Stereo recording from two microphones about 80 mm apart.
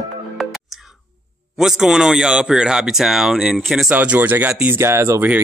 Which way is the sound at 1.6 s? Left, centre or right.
Centre.